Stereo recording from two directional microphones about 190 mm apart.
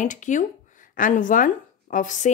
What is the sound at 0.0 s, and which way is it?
A woman's voice, 40° left (ahead or behind).